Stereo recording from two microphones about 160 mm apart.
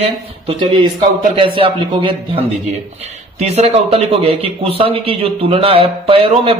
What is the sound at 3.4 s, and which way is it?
Speech, 40° right (ahead or behind).